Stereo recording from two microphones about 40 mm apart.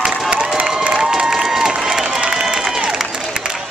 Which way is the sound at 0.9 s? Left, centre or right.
Centre.